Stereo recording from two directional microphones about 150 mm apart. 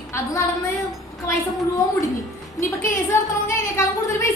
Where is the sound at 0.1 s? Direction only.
20° left (ahead or behind).